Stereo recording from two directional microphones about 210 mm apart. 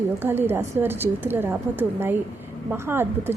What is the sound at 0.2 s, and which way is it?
A woman's voice, 10° right (ahead or behind).